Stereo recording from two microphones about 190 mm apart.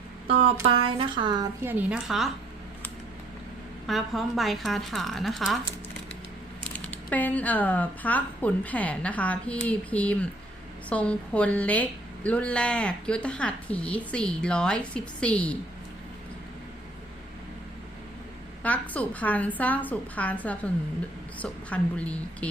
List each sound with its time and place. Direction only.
0.3 s a woman's voice: 30° right (ahead or behind)
1.6 s speech: 10° right (ahead or behind)
3.8 s speech: centre (ahead or behind)
6.7 s a woman's voice: 10° left (ahead or behind)
18.6 s a woman's voice: 10° left (ahead or behind)